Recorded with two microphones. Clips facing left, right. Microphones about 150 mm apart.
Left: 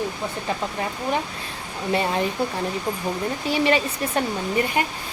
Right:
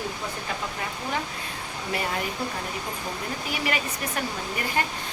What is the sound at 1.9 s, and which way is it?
Speech, 25° left (ahead or behind).